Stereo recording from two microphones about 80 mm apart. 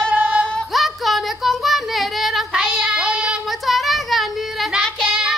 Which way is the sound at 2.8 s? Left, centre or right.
Centre.